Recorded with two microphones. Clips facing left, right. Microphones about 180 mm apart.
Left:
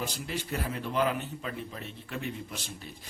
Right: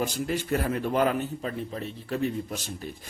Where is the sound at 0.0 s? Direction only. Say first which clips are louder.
Right 7 dB; 50° right (ahead or behind).